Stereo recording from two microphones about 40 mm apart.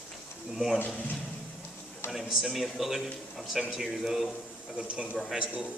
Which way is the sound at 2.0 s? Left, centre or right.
Centre.